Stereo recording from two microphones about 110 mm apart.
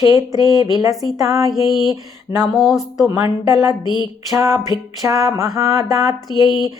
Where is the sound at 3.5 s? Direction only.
30° right (ahead or behind).